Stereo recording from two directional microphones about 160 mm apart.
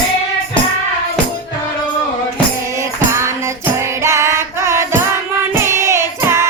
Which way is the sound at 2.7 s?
20° right (ahead or behind).